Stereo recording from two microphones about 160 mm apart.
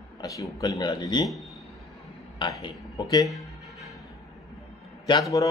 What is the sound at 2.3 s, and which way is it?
Speech, 30° left (ahead or behind).